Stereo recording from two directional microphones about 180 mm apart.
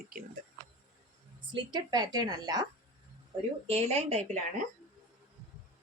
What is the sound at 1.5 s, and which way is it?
Speech, 25° right (ahead or behind).